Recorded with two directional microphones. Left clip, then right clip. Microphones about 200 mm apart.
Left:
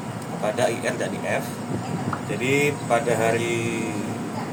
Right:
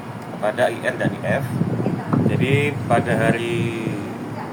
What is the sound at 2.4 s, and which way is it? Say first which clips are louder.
Speech: right 1 dB; centre (ahead or behind).